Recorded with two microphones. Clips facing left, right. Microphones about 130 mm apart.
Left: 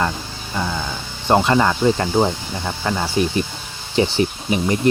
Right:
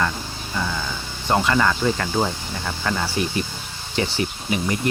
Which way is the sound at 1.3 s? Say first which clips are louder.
Left 4 dB; 30° left (ahead or behind).